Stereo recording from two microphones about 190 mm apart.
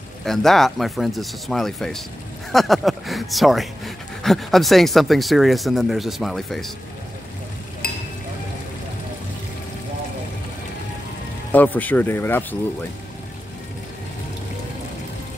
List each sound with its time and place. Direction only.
0.2 s speech: centre (ahead or behind)
7.8 s a sound: 55° left (ahead or behind)
11.5 s speech: 10° left (ahead or behind)